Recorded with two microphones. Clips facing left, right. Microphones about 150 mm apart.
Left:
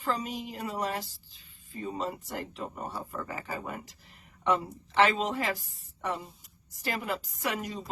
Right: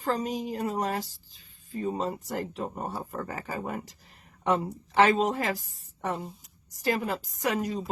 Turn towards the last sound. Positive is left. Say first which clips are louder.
# right 5 dB
turn(degrees=-40)  # may be behind; listen again after turning